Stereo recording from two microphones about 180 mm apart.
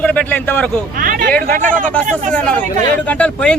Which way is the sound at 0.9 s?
50° right (ahead or behind).